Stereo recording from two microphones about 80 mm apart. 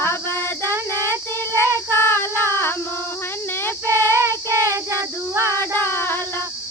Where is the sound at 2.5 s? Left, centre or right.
Left.